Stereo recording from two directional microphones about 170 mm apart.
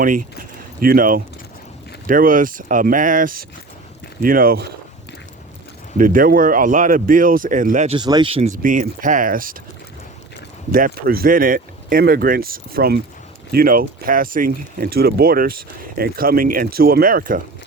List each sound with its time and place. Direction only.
0.0 s speech: 50° right (ahead or behind)
6.0 s speech: 55° right (ahead or behind)
7.9 s speech: 25° right (ahead or behind)
8.5 s speech: 50° right (ahead or behind)
10.7 s speech: 55° right (ahead or behind)